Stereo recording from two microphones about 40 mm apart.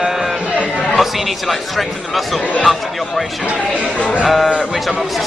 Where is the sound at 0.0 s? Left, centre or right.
Centre.